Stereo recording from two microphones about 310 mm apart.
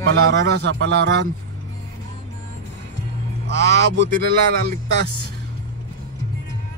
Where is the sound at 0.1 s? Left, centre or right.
Right.